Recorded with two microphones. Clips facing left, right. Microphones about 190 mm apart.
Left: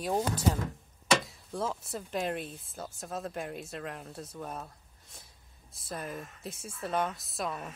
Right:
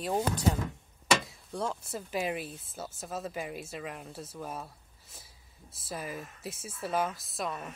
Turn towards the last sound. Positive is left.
turn(degrees=0)  # may be behind; listen again after turning